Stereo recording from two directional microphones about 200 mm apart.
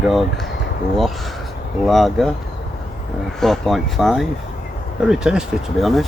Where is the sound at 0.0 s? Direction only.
Centre (ahead or behind).